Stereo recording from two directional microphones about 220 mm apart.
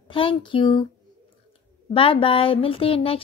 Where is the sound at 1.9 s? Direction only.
25° left (ahead or behind).